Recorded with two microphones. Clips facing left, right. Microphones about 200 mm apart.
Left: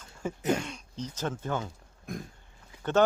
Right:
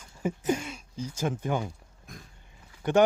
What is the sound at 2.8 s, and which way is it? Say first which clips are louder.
Speech: right 2 dB; 15° right (ahead or behind).